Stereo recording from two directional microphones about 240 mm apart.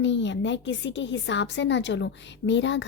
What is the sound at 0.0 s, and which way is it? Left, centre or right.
A woman's voice, left.